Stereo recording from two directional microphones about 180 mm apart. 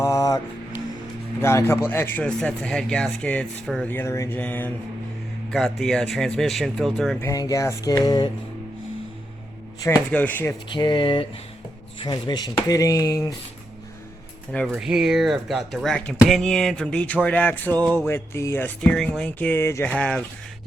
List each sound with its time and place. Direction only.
0.0 s music: 20° left (ahead or behind)
1.4 s speech: 15° left (ahead or behind)
7.2 s speech: 20° left (ahead or behind)
10.1 s speech: 10° left (ahead or behind)
10.7 s speech: 25° left (ahead or behind)
14.7 s speech: 5° right (ahead or behind)